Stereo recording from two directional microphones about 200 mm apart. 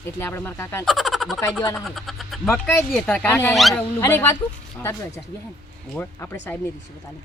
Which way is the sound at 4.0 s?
15° left (ahead or behind).